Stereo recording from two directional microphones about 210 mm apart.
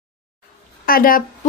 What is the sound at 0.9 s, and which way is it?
Speech, 40° left (ahead or behind).